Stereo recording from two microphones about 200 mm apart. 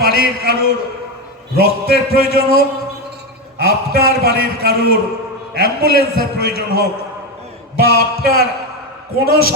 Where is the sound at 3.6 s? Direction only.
50° left (ahead or behind).